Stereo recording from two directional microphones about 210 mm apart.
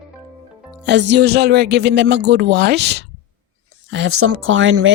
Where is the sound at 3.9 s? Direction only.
80° right; by 4.9 s 65° right (ahead or behind).